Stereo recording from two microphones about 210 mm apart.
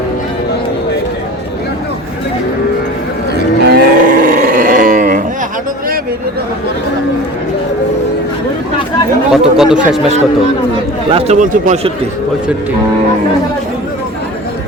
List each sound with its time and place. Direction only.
3.3 s livestock: 45° right (ahead or behind)
9.3 s speech: 5° right (ahead or behind)
11.1 s speech: 35° right (ahead or behind)